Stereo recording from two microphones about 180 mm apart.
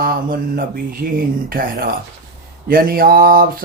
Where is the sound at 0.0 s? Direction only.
55° right (ahead or behind).